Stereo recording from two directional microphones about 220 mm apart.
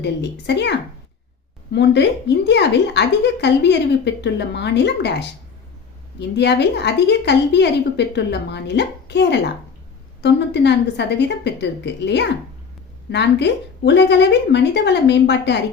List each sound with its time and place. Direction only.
0.0 s a woman's voice: 50° left (ahead or behind)
1.7 s a woman's voice: 50° left (ahead or behind)